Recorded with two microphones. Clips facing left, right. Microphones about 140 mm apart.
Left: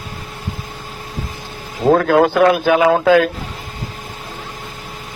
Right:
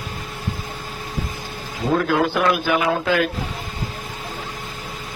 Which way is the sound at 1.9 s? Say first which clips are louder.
Left 6 dB; 90° left.